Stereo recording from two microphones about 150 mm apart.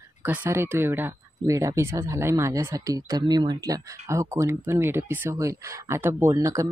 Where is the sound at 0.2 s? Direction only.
15° right (ahead or behind).